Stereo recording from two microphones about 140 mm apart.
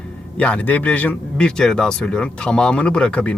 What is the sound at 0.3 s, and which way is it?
Speech, 10° left (ahead or behind).